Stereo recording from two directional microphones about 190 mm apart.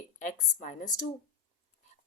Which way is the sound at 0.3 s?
40° left (ahead or behind).